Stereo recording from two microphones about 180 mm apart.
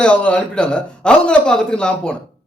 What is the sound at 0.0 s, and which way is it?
A man's voice, 5° left (ahead or behind).